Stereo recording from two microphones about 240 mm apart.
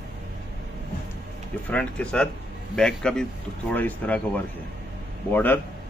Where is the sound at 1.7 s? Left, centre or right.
Centre.